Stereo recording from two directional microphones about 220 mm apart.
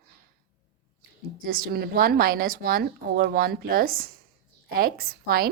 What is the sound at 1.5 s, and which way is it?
A woman's voice, 40° right (ahead or behind).